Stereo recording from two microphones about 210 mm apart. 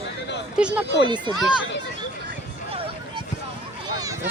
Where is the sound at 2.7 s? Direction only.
25° right (ahead or behind).